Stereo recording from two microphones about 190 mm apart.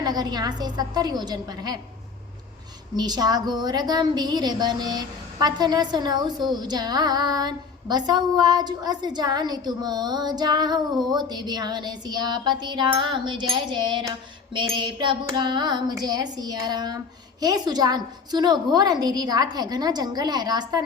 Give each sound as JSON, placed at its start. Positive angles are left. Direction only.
{"t": 0.0, "sound": "a woman's voice", "side_deg": -20}
{"t": 2.9, "sound": "a woman's voice", "side_deg": -20}